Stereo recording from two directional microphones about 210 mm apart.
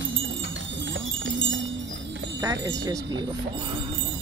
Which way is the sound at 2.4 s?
15° right (ahead or behind).